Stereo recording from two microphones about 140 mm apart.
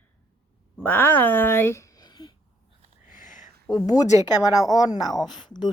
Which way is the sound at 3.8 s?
25° left (ahead or behind).